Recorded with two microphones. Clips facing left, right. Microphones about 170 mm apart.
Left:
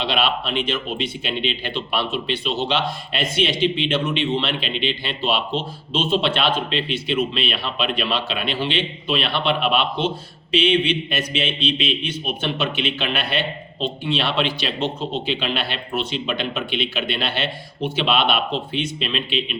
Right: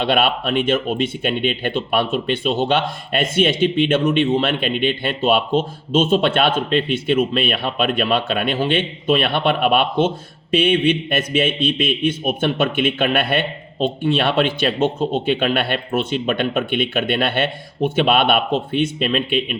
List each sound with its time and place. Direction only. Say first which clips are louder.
0.0 s speech: right 4 dB; 50° right (ahead or behind)